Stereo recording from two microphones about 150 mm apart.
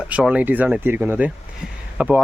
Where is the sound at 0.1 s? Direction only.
10° right (ahead or behind).